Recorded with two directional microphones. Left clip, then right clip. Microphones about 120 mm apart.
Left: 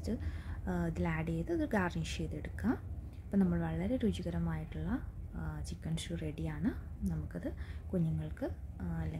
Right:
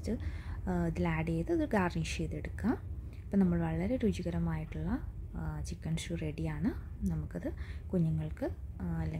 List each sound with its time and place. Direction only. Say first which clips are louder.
0.0 s speech: right 2 dB; 20° right (ahead or behind)